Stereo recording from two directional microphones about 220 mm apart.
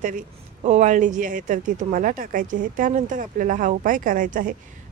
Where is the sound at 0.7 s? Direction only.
35° right (ahead or behind).